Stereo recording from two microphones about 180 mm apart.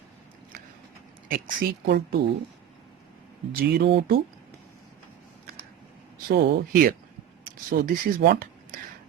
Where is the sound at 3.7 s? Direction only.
70° right (ahead or behind).